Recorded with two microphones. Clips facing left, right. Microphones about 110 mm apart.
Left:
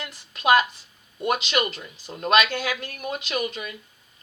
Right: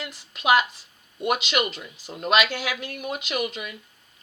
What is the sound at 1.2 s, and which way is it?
Speech, 10° right (ahead or behind).